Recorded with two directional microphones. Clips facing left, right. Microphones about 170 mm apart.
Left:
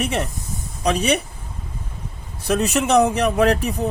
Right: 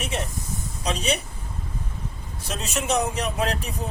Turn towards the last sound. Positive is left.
turn(degrees=60)  # may be behind; listen again after turning